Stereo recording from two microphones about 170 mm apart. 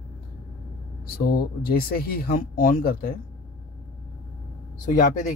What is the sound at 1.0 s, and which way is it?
Speech, 60° left (ahead or behind).